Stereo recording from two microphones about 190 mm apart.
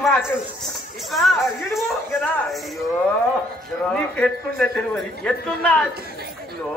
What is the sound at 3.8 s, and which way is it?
A man's voice, 5° left (ahead or behind).